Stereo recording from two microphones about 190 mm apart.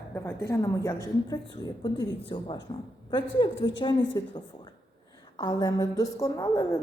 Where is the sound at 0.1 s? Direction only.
10° left (ahead or behind).